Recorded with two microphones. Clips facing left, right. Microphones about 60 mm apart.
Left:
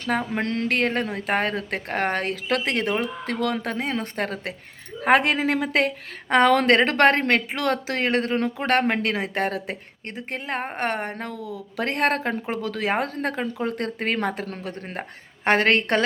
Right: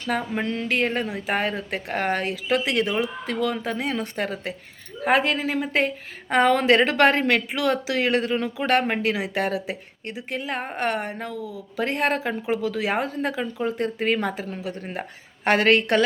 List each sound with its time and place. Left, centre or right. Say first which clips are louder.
0.3 s speech: left 1 dB; left
3.8 s a woman's voice: even; left
5.0 s a woman's voice: left 2 dB; left
6.2 s a woman's voice: left 1 dB; left
6.7 s speech: even; left